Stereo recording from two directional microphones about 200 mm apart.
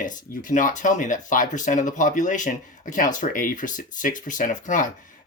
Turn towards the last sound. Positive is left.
turn(degrees=40)  # may be behind; listen again after turning